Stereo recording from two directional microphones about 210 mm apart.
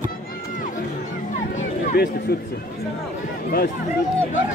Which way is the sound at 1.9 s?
50° left (ahead or behind).